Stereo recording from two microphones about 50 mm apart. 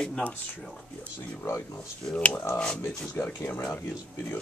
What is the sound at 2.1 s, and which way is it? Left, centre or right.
Speech, left.